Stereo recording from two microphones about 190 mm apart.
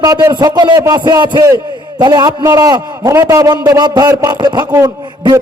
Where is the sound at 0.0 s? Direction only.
20° right (ahead or behind).